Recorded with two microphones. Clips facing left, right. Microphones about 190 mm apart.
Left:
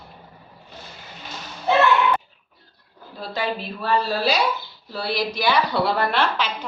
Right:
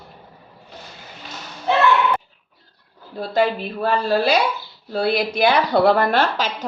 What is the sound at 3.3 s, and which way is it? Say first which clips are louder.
A woman's voice: right 7 dB; 50° right (ahead or behind).